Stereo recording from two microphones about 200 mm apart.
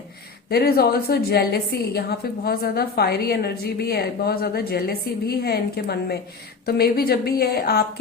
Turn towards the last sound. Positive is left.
turn(degrees=50)  # may be behind; listen again after turning